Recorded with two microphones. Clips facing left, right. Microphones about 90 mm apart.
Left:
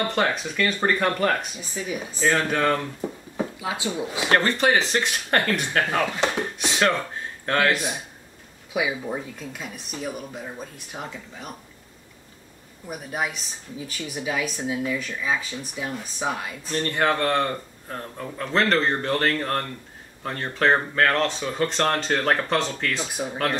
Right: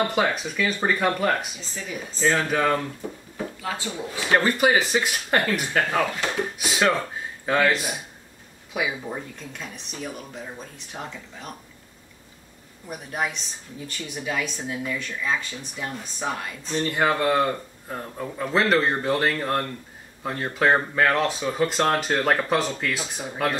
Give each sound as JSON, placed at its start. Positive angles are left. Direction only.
{"t": 0.0, "sound": "speech", "side_deg": -5}
{"t": 1.6, "sound": "speech", "side_deg": 10}
{"t": 2.3, "sound": "speech", "side_deg": -5}
{"t": 3.3, "sound": "speech", "side_deg": 15}
{"t": 4.3, "sound": "speech", "side_deg": -5}
{"t": 12.8, "sound": "speech", "side_deg": 5}
{"t": 16.8, "sound": "speech", "side_deg": -5}